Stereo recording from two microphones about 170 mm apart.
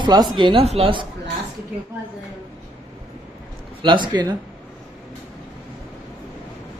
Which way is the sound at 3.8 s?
30° right (ahead or behind).